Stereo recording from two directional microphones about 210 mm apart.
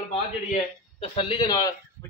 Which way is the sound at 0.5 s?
30° left (ahead or behind).